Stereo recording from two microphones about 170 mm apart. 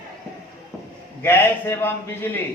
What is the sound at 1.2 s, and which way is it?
A man's voice, 15° left (ahead or behind).